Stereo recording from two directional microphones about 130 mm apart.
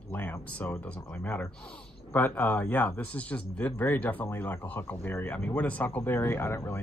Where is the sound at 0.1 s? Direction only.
15° left (ahead or behind).